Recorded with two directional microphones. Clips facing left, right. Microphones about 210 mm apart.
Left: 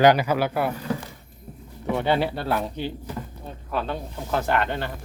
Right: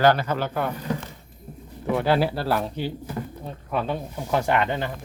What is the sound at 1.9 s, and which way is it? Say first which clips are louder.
Speech: right 1 dB; centre (ahead or behind).